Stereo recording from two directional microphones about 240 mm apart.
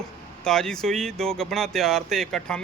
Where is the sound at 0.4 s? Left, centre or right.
Centre.